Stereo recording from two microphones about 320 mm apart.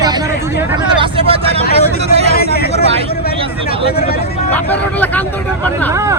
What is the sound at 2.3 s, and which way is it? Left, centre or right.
Speech, left.